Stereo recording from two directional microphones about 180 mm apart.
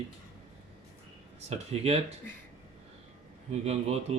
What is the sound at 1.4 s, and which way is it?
Speech, 35° right (ahead or behind).